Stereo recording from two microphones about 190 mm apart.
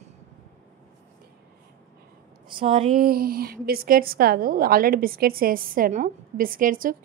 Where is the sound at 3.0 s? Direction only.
50° right (ahead or behind).